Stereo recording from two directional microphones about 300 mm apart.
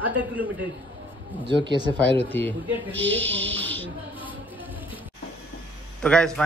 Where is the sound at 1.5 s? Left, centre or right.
Centre.